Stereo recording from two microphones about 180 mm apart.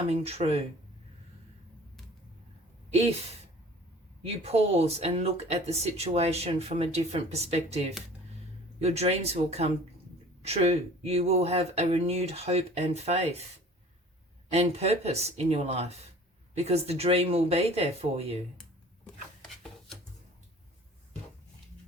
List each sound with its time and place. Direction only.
0.1 s speech: 35° right (ahead or behind)
2.9 s speech: 35° right (ahead or behind)
4.2 s speech: 35° right (ahead or behind)
14.5 s speech: 35° right (ahead or behind)